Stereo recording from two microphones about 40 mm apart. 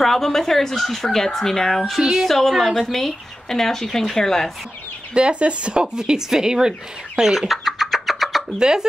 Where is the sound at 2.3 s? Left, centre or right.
Centre.